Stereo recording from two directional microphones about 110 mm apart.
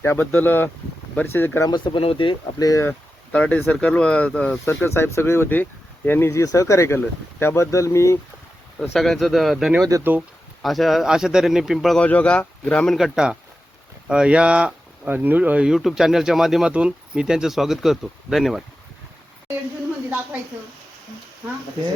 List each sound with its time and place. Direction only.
0.0 s speech: 20° left (ahead or behind)
1.6 s speech: 45° left (ahead or behind)
2.6 s speech: 30° left (ahead or behind)
3.3 s speech: 10° left (ahead or behind)
4.6 s speech: 25° left (ahead or behind)
8.9 s speech: centre (ahead or behind)
10.0 s speech: 15° right (ahead or behind)
10.6 s speech: centre (ahead or behind)
11.9 s speech: 10° left (ahead or behind)
12.9 s speech: 5° right (ahead or behind)